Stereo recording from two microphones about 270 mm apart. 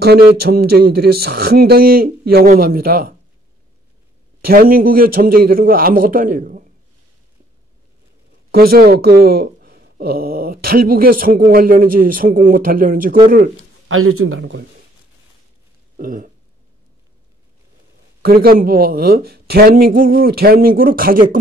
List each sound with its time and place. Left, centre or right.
0.4 s speech: right
4.5 s speech: right
8.5 s speech: right
13.8 s speech: right
16.0 s speech: right
18.2 s speech: right